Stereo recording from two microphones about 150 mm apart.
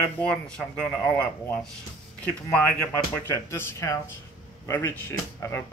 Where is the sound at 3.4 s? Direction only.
20° left (ahead or behind).